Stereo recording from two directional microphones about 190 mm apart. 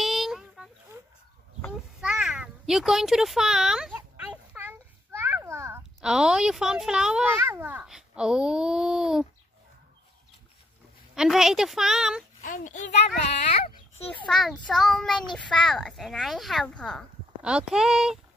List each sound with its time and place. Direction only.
0.0 s a sound: centre (ahead or behind)
2.0 s a sound: 5° right (ahead or behind)
5.9 s a child's voice: 5° right (ahead or behind)
11.1 s a child's voice: 5° right (ahead or behind)
12.4 s a child's voice: 45° left (ahead or behind)
14.2 s a child's voice: centre (ahead or behind)